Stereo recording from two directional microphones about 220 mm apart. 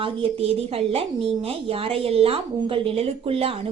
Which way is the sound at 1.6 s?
25° right (ahead or behind).